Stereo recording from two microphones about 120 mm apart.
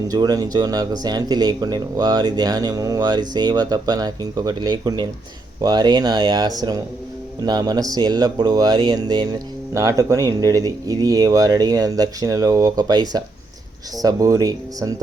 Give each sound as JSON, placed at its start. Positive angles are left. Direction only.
{"t": 0.1, "sound": "speech", "side_deg": -30}